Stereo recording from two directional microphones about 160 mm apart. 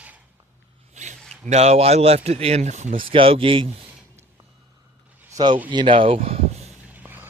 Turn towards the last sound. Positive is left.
turn(degrees=-10)  # may be behind; listen again after turning